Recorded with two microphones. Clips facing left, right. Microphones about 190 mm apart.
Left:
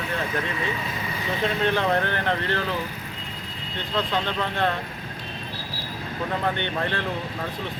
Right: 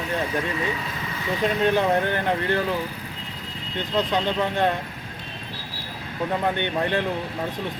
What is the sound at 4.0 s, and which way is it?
Speech, 20° right (ahead or behind).